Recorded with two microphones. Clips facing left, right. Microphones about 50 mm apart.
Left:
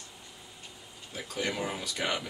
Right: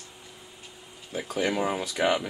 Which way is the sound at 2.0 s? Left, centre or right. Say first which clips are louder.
Right 8 dB; right.